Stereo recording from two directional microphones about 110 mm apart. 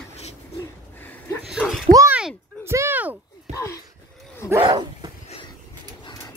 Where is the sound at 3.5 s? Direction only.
30° left (ahead or behind).